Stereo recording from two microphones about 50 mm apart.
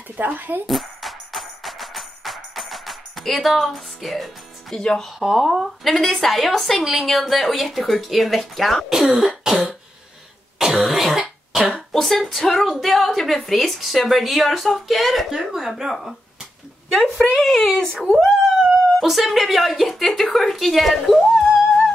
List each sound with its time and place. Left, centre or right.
0.2 s speech: right
0.7 s music: centre
4.7 s speech: centre
5.2 s a woman's voice: centre
9.4 s throat clearing: centre
11.9 s a woman's voice: centre
16.9 s a woman's voice: centre